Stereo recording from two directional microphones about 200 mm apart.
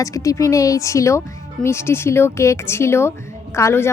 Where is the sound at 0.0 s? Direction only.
15° left (ahead or behind).